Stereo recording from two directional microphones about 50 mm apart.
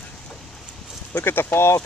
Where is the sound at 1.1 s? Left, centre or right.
Left.